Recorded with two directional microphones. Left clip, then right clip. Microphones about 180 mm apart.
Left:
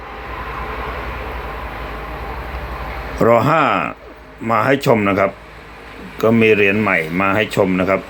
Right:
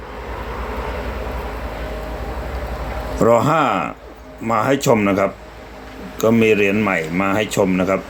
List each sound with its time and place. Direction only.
3.2 s speech: 10° left (ahead or behind)